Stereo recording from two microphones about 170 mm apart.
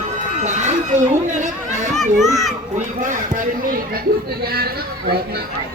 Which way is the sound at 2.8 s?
50° right (ahead or behind).